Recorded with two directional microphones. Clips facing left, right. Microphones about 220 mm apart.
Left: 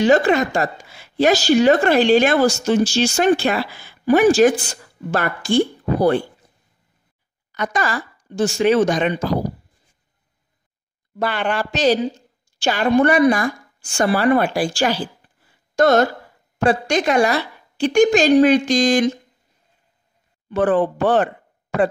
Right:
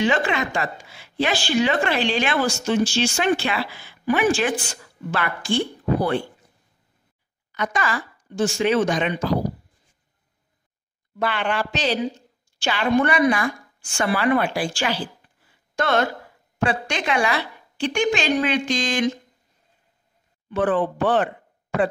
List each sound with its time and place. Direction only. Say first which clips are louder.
0.0 s a woman's voice: left 7 dB; 40° left (ahead or behind)
7.5 s a woman's voice: left 3 dB; 40° left (ahead or behind)
11.1 s a woman's voice: left 2 dB; 40° left (ahead or behind)
20.4 s speech: left 4 dB; 40° left (ahead or behind)